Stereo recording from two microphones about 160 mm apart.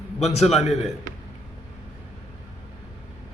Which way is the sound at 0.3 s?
Centre (ahead or behind).